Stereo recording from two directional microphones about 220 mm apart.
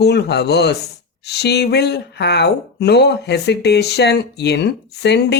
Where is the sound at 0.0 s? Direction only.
50° left (ahead or behind).